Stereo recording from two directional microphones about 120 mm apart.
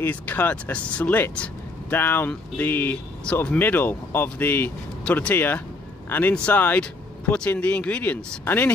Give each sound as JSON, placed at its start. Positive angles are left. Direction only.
{"t": 0.0, "sound": "speech", "side_deg": 15}